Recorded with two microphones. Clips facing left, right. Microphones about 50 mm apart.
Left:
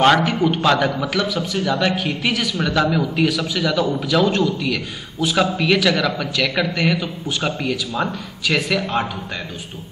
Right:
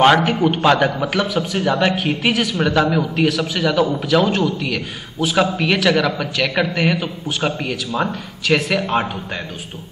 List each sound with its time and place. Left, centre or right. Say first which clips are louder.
0.0 s a man's voice: right 2 dB; centre; by 2.0 s right
2.0 s speech: right 3 dB; right
2.5 s a man's voice: right 2 dB; centre